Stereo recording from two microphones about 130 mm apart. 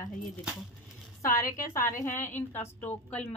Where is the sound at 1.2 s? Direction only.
25° left (ahead or behind).